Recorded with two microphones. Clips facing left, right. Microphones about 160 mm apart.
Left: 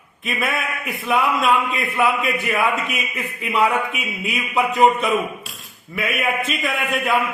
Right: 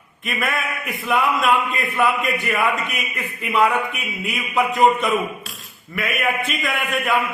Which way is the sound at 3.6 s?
30° left (ahead or behind).